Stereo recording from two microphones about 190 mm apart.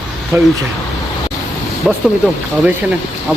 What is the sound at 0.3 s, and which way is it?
Speech, 15° right (ahead or behind).